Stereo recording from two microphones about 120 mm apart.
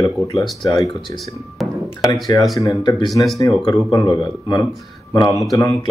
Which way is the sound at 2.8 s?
40° left (ahead or behind).